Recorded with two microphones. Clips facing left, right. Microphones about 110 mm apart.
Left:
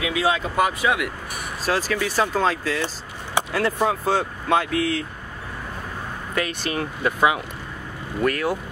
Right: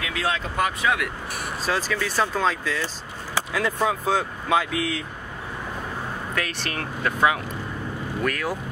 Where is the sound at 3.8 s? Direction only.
Centre (ahead or behind).